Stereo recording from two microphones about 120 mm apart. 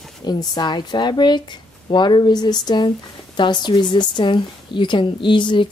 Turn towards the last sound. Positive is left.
turn(degrees=45)  # may be behind; listen again after turning